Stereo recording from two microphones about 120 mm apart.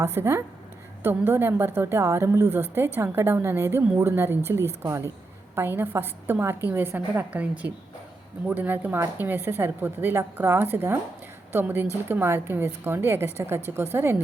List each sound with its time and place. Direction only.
0.0 s a woman's voice: 20° right (ahead or behind)